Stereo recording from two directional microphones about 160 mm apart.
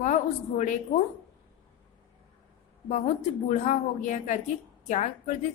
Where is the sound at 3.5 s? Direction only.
50° left (ahead or behind).